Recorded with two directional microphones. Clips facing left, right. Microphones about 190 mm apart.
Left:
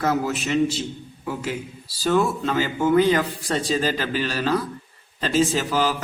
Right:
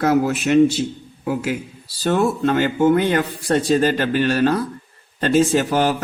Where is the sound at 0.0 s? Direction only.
60° right (ahead or behind).